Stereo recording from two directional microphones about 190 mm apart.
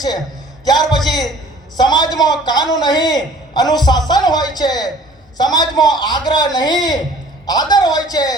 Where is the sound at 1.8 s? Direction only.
20° left (ahead or behind).